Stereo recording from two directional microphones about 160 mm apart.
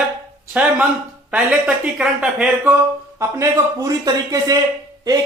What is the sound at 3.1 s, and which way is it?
Speech, 20° right (ahead or behind).